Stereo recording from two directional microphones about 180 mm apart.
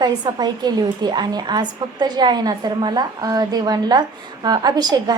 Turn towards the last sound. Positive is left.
turn(degrees=-20)  # may be behind; listen again after turning